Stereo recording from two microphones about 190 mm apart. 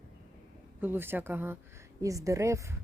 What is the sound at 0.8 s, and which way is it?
A woman's voice, 10° right (ahead or behind).